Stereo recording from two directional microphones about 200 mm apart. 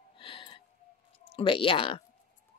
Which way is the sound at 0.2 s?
25° left (ahead or behind).